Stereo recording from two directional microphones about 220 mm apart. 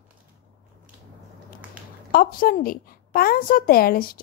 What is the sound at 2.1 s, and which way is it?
Speech, 40° left (ahead or behind).